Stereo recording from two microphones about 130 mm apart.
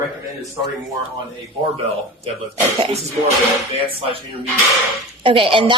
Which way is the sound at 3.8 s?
45° right (ahead or behind).